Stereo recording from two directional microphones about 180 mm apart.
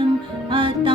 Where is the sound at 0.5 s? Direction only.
30° right (ahead or behind).